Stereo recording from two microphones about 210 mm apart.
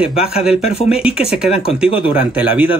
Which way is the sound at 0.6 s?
30° left (ahead or behind).